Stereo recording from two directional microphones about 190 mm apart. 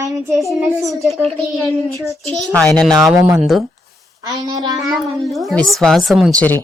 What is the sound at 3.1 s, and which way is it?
Speech, 10° right (ahead or behind).